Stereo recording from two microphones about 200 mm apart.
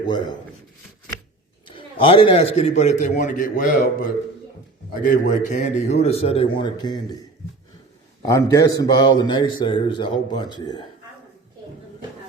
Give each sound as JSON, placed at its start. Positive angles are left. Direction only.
{"t": 0.0, "sound": "a man's voice", "side_deg": 20}
{"t": 1.6, "sound": "a man's voice", "side_deg": 25}
{"t": 8.3, "sound": "a man's voice", "side_deg": 15}